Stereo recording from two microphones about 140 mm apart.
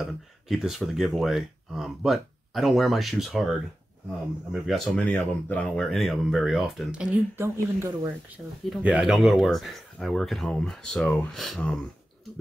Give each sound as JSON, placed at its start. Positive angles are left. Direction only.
{"t": 0.0, "sound": "speech", "side_deg": -5}
{"t": 7.3, "sound": "speech", "side_deg": -20}
{"t": 8.6, "sound": "speech", "side_deg": -5}